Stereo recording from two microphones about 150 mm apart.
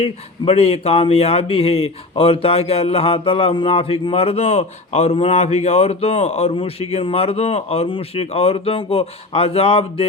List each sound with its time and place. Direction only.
0.0 s speech: 45° left (ahead or behind)